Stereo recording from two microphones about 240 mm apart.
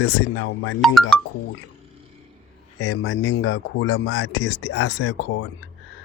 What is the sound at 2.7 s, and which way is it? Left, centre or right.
Speech, left.